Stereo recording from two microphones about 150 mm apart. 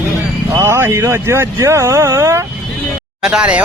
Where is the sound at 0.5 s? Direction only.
15° right (ahead or behind).